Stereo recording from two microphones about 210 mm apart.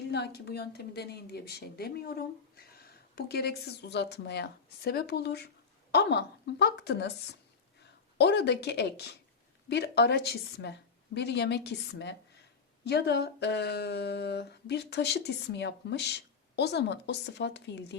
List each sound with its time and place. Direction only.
0.1 s speech: 50° left (ahead or behind)